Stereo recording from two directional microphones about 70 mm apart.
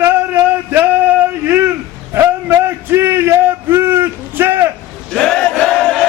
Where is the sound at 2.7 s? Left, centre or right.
Right.